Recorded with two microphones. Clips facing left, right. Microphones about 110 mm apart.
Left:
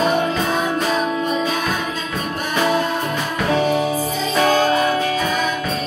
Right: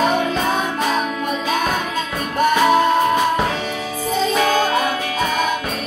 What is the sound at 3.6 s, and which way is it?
Music, 40° left (ahead or behind).